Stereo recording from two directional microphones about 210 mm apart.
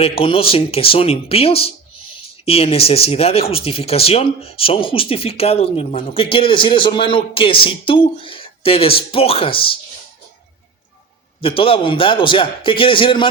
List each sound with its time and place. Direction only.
0.0 s speech: 25° left (ahead or behind)
11.3 s speech: 25° left (ahead or behind)